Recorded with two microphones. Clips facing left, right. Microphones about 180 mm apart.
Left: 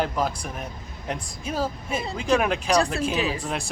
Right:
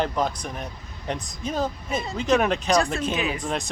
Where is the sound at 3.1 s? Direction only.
30° left (ahead or behind).